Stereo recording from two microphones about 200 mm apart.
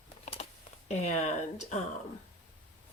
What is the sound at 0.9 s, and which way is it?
Speech, 35° left (ahead or behind).